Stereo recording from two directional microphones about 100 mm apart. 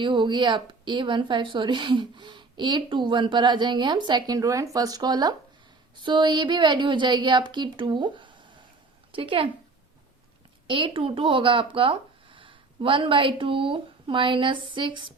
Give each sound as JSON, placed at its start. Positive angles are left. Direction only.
{"t": 0.0, "sound": "a woman's voice", "side_deg": -50}
{"t": 10.7, "sound": "speech", "side_deg": -60}